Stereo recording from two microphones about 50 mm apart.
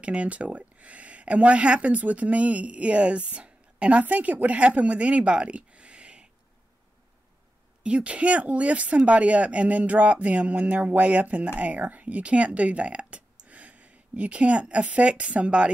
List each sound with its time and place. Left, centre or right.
0.0 s speech: right
7.8 s speech: right